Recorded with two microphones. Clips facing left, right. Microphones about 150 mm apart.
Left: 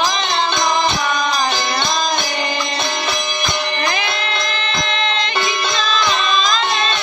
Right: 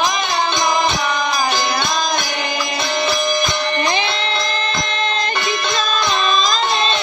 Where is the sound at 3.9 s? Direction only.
30° right (ahead or behind).